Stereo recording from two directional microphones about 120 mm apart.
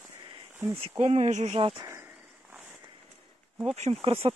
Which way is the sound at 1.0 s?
70° right (ahead or behind).